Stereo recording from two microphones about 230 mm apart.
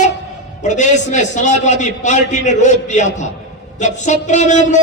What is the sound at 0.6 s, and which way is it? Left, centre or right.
A man's voice, left.